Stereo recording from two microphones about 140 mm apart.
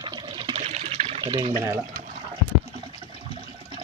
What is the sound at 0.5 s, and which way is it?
Water, 50° right (ahead or behind).